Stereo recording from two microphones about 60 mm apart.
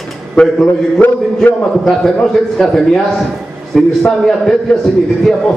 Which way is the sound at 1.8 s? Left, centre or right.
Centre.